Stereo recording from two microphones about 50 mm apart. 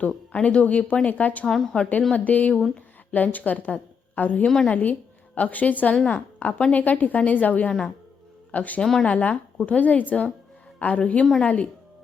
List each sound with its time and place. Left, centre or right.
0.0 s speech: left
1.5 s speech: centre
2.1 s a woman's voice: left
4.4 s speech: centre
4.7 s a woman's voice: left
7.7 s speech: centre
8.5 s a woman's voice: left
8.8 s speech: centre
9.0 s a woman's voice: left